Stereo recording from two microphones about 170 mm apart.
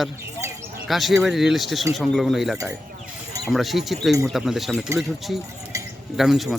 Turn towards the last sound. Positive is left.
turn(degrees=0)  # may be behind; listen again after turning